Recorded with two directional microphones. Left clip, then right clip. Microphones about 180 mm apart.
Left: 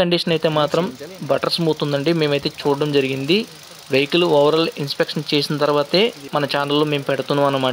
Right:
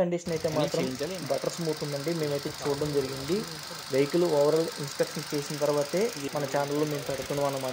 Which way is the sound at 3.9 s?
30° left (ahead or behind).